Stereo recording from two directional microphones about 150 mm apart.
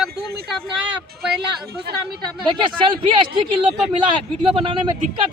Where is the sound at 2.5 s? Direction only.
35° right (ahead or behind).